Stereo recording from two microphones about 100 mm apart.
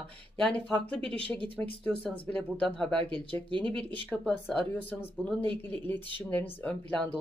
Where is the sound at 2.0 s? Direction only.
15° left (ahead or behind).